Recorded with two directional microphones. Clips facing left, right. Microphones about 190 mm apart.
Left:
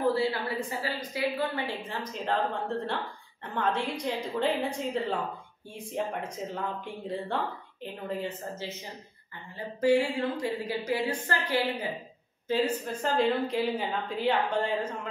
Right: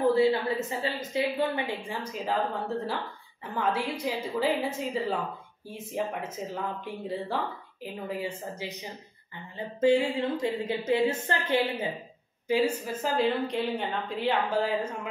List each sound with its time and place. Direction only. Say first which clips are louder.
0.0 s a woman's voice: right 4 dB; 20° right (ahead or behind)
9.8 s speech: right 1 dB; 20° right (ahead or behind)
12.4 s a woman's voice: right 2 dB; 10° right (ahead or behind)